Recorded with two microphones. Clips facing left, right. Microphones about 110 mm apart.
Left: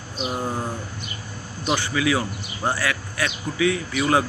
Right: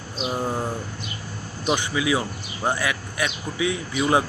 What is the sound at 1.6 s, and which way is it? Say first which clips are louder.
Speech: left 1 dB; 15° right (ahead or behind).